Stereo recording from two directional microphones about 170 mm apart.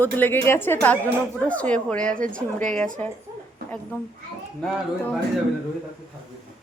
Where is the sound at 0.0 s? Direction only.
10° left (ahead or behind).